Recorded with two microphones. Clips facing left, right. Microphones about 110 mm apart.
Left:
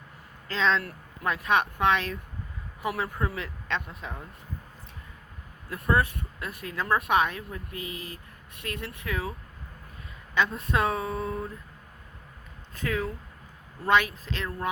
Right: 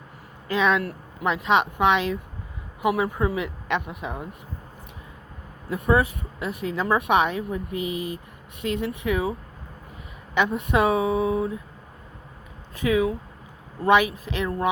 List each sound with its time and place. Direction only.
0.4 s speech: 15° right (ahead or behind)
5.9 s speech: 15° right (ahead or behind)
10.3 s speech: 20° right (ahead or behind)
11.0 s a sound: 85° right
12.7 s speech: 10° right (ahead or behind)